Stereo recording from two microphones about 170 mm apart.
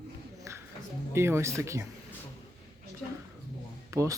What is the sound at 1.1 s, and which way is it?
Speech, 15° right (ahead or behind).